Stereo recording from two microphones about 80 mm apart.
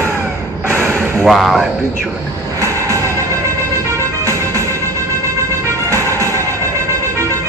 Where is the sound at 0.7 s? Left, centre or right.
Right.